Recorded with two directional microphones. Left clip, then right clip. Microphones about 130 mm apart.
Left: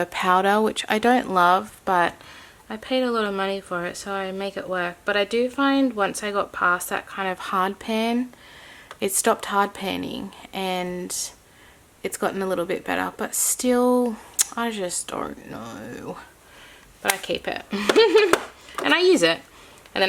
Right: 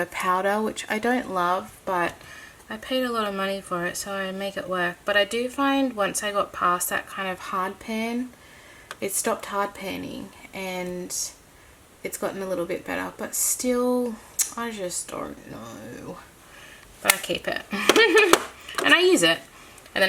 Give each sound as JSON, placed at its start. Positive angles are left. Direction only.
{"t": 0.0, "sound": "speech", "side_deg": 45}
{"t": 0.5, "sound": "speech", "side_deg": 30}
{"t": 17.5, "sound": "speech", "side_deg": 25}
{"t": 18.9, "sound": "speech", "side_deg": 35}